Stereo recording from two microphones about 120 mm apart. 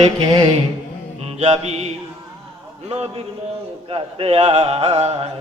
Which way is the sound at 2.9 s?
55° right (ahead or behind).